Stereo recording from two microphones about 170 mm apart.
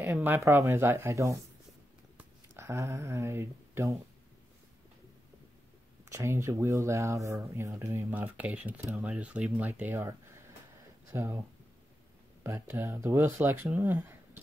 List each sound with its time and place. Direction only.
0.0 s speech: 15° right (ahead or behind)
2.5 s speech: 15° right (ahead or behind)
6.0 s speech: 15° right (ahead or behind)
12.4 s speech: 15° right (ahead or behind)